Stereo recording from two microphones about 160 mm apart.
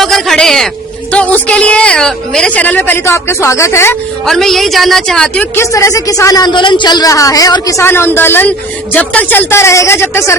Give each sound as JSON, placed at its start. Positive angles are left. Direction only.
{"t": 0.0, "sound": "a sound", "side_deg": 0}
{"t": 1.1, "sound": "a woman's voice", "side_deg": 10}
{"t": 4.3, "sound": "a woman's voice", "side_deg": 0}
{"t": 5.7, "sound": "a woman's voice", "side_deg": 20}